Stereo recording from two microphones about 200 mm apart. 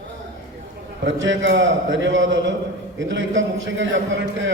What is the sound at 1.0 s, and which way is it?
A man's voice, 70° right (ahead or behind).